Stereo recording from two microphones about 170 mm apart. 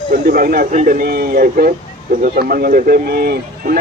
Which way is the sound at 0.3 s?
60° right (ahead or behind).